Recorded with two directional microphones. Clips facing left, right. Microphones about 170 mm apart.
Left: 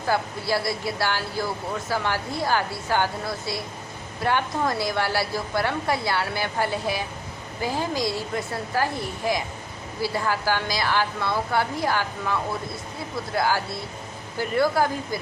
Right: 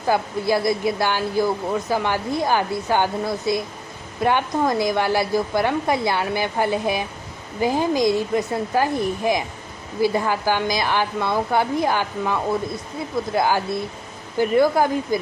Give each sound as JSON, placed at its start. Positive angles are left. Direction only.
{"t": 0.1, "sound": "a woman's voice", "side_deg": -20}